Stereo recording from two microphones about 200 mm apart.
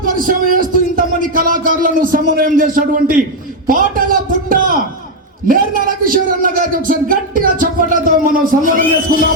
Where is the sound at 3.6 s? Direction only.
45° right (ahead or behind).